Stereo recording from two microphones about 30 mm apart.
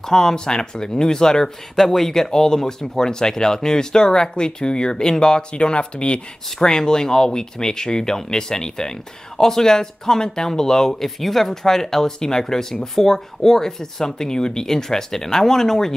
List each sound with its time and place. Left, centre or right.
0.0 s speech: centre
1.8 s speech: centre; by 6.2 s left
6.6 s speech: left